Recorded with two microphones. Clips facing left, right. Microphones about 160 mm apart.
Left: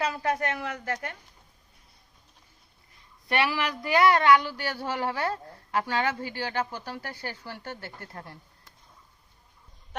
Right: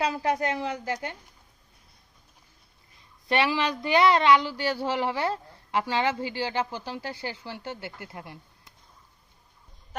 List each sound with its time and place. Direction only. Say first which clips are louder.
0.0 s speech: right 2 dB; 25° right (ahead or behind)
3.2 s speech: right 2 dB; 20° right (ahead or behind)